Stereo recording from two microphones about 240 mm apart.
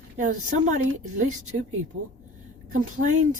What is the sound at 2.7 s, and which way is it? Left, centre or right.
Speech, right.